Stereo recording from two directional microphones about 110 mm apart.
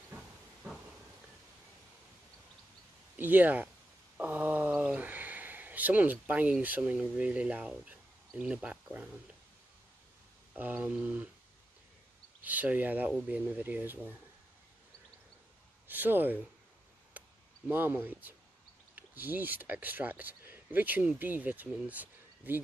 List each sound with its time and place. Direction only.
3.2 s speech: 15° right (ahead or behind)
4.2 s a sound: 15° right (ahead or behind)
7.0 s speech: 10° right (ahead or behind)
10.5 s speech: 15° right (ahead or behind)
12.4 s speech: 15° right (ahead or behind)
15.9 s speech: 15° right (ahead or behind)
17.1 s a sound: 15° right (ahead or behind)
17.6 s speech: 15° right (ahead or behind)